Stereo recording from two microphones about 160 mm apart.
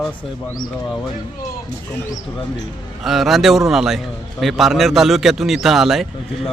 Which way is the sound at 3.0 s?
Centre (ahead or behind).